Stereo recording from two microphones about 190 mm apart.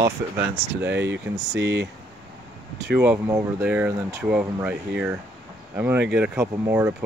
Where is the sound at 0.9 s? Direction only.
70° right (ahead or behind).